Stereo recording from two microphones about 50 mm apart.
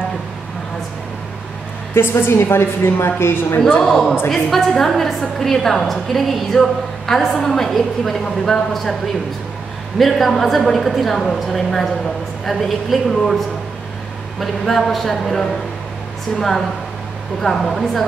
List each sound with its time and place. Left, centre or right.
2.0 s a woman's voice: left
3.8 s a woman's voice: centre
9.9 s a woman's voice: centre
14.4 s a woman's voice: centre